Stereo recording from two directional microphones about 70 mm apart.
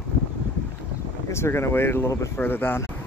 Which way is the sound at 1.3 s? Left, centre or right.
Left.